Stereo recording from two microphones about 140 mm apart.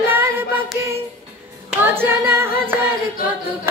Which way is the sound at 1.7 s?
15° right (ahead or behind).